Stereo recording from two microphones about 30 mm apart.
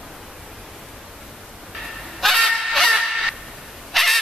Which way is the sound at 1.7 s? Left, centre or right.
Centre.